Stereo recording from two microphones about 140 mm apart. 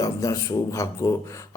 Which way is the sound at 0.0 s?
25° left (ahead or behind).